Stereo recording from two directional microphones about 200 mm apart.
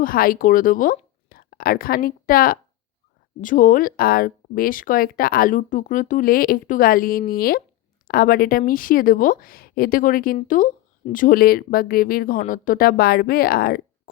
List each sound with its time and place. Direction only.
0.0 s a woman's voice: 45° left (ahead or behind)